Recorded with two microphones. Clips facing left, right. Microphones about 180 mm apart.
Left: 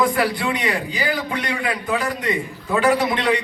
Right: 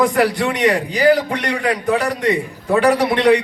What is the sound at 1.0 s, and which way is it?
Speech, 75° right (ahead or behind).